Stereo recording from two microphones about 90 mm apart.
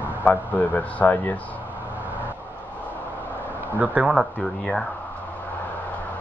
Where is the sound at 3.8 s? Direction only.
15° right (ahead or behind).